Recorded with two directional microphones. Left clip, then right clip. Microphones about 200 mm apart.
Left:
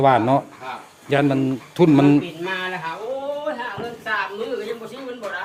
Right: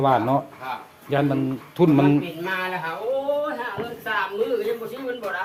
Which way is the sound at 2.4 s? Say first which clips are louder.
Left 1 dB; centre (ahead or behind).